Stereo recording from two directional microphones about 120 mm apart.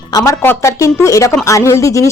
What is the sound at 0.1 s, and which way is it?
Speech, 25° left (ahead or behind).